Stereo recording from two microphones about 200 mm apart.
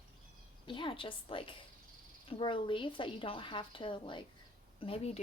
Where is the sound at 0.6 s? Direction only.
25° left (ahead or behind).